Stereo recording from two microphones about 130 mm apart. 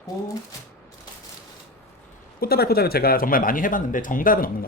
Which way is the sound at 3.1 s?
90° left.